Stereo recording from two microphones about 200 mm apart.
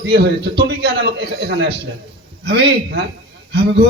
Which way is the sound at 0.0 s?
55° right (ahead or behind).